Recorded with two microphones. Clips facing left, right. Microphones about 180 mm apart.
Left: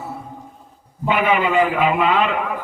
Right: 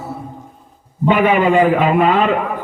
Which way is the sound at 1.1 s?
45° right (ahead or behind).